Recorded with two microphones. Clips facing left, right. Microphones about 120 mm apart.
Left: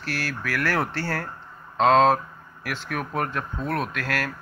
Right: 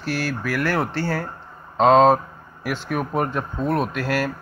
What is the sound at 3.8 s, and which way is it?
Speech, 30° right (ahead or behind).